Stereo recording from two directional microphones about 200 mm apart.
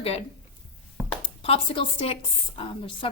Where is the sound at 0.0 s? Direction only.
30° left (ahead or behind).